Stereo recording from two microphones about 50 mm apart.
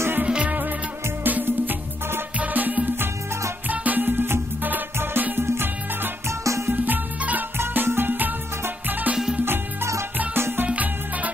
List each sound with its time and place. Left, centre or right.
0.2 s music: right
2.3 s music: right
6.4 s music: right
6.7 s music: right
7.5 s music: right
9.1 s music: centre
9.4 s music: right
10.7 s music: right